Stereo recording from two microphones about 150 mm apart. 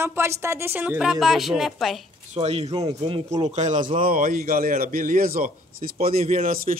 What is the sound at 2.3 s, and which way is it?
A man's voice, 45° right (ahead or behind).